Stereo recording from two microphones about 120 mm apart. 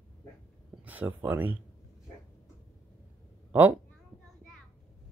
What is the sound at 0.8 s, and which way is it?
Speech, 15° right (ahead or behind).